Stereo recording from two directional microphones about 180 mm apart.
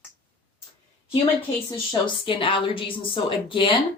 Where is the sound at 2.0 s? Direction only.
30° left (ahead or behind).